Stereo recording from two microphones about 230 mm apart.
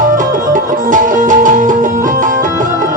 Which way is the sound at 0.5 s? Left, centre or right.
Right.